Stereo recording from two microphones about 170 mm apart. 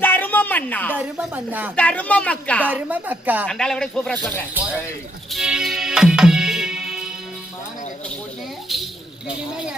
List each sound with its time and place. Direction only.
0.0 s a sound: 10° left (ahead or behind)
0.9 s speech: 10° right (ahead or behind)
1.7 s speech: 10° left (ahead or behind)
2.6 s speech: 10° right (ahead or behind)
3.4 s speech: 5° left (ahead or behind)
4.5 s speech: 5° right (ahead or behind)
5.3 s music: 5° right (ahead or behind)
8.7 s a sound: centre (ahead or behind)